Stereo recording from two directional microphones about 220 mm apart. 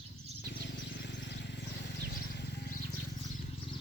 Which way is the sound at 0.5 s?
50° left (ahead or behind).